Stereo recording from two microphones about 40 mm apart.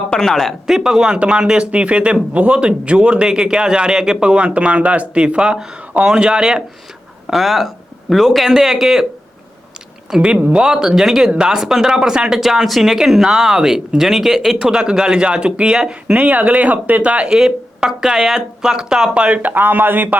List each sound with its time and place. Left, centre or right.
0.1 s speech: centre
0.7 s speech: centre
1.5 s a man's voice: right
4.2 s a man's voice: right
7.3 s speech: centre
10.1 s speech: right
11.3 s speech: centre
12.4 s speech: centre
14.6 s a man's voice: right
16.1 s speech: right
17.2 s speech: centre
19.1 s a man's voice: right
19.4 s speech: right